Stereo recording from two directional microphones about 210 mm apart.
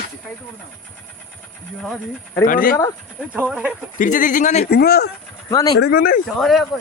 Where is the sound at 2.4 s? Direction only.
40° left (ahead or behind).